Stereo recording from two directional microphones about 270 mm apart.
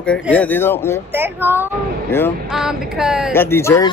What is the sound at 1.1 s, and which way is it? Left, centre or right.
Speech, centre.